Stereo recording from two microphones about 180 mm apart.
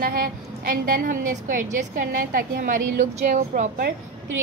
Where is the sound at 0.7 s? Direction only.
50° right (ahead or behind).